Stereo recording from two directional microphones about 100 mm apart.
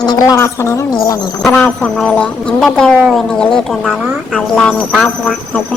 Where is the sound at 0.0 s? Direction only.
45° left (ahead or behind).